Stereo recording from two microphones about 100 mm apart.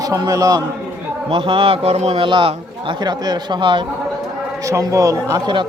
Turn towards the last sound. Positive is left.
turn(degrees=-35)  # may be behind; listen again after turning